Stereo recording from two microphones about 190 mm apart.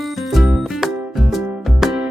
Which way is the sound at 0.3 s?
Centre (ahead or behind).